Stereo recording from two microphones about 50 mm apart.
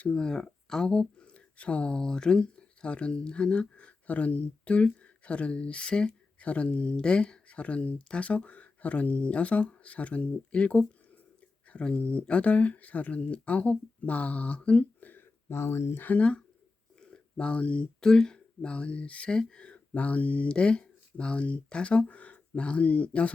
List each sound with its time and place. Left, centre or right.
0.1 s speech: centre
1.2 s speech: left
15.4 s speech: left
16.0 s speech: left
17.0 s a sound: centre
18.0 s speech: centre